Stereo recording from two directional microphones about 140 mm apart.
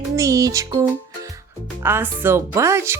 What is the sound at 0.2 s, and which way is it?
Speech, 25° right (ahead or behind).